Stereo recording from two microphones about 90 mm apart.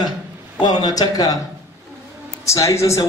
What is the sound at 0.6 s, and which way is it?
Speech, 50° left (ahead or behind).